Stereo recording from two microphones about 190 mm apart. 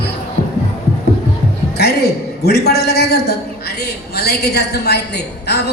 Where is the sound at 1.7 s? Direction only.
60° left (ahead or behind).